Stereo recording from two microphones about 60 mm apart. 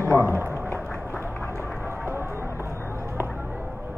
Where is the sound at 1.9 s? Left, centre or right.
Right.